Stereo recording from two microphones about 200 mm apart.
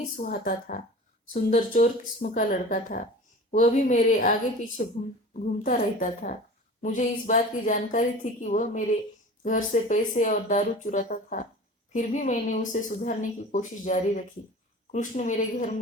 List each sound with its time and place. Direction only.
0.2 s a woman's voice: 45° left (ahead or behind)